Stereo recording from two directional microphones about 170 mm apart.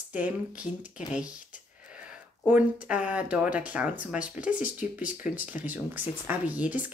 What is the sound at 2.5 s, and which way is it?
Speech, 10° right (ahead or behind).